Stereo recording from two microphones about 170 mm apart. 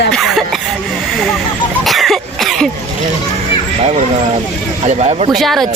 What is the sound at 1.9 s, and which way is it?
Cough, centre (ahead or behind).